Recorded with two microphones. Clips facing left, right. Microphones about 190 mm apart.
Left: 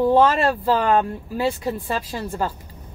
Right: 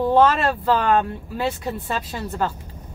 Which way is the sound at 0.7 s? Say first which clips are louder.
Left 1 dB; 35° left (ahead or behind).